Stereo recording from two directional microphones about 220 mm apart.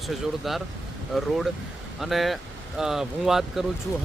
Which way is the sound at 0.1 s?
Centre (ahead or behind).